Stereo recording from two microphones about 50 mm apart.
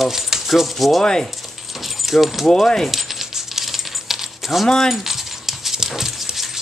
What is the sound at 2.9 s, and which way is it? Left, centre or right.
Coin, centre.